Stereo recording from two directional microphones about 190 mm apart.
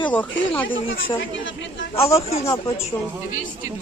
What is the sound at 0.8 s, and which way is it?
Speech, 90° left.